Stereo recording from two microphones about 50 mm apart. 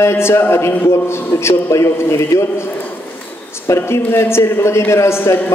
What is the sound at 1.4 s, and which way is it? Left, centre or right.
A man's voice, left.